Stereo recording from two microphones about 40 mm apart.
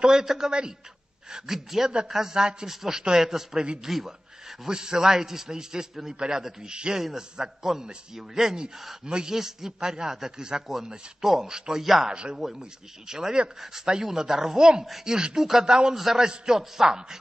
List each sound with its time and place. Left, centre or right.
0.0 s speech: centre
0.5 s a man's voice: right
1.3 s speech: centre
1.9 s a man's voice: right
3.8 s a sound: centre
4.6 s a man's voice: centre
11.8 s speech: centre
12.1 s a man's voice: right
15.9 s speech: centre